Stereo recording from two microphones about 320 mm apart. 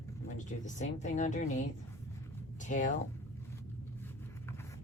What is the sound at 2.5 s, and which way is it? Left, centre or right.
Speech, left.